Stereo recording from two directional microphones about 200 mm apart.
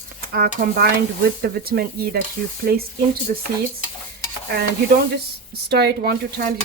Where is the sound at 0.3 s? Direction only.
50° right (ahead or behind).